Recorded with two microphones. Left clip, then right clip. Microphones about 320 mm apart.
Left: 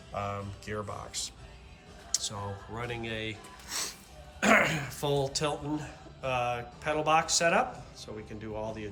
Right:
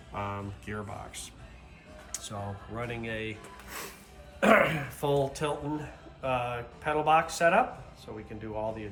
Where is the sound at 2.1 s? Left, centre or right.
Centre.